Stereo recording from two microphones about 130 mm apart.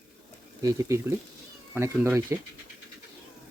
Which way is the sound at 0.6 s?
25° right (ahead or behind).